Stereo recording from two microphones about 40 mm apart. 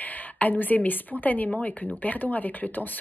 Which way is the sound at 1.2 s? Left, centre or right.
Left.